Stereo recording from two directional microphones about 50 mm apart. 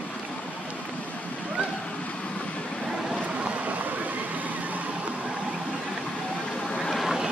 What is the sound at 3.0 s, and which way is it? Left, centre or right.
Vehicle, right.